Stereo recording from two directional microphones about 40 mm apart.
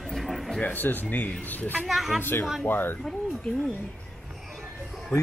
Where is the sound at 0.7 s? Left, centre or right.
Left.